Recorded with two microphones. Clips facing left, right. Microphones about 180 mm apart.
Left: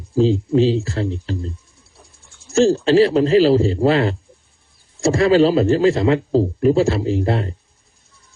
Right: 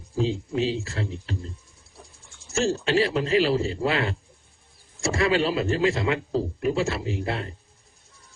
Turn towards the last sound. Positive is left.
turn(degrees=35)  # may be behind; listen again after turning